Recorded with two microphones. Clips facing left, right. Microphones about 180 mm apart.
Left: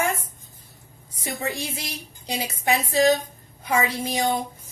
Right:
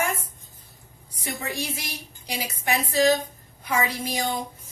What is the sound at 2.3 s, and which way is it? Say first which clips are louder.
A woman's voice: left 3 dB; 25° left (ahead or behind).